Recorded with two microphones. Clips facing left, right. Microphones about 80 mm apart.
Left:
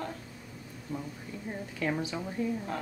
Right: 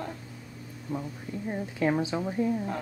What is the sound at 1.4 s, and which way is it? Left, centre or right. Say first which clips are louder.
A woman's voice: right 6 dB; right.